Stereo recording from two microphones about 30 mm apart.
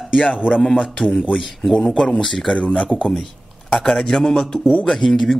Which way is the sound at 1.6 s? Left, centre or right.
Centre.